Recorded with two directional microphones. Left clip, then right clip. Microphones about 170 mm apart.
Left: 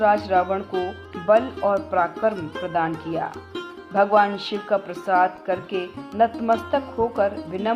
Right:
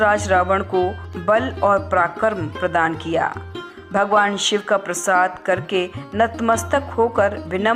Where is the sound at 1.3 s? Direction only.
20° right (ahead or behind).